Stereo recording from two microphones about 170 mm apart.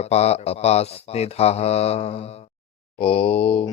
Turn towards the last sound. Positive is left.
turn(degrees=35)  # may be behind; listen again after turning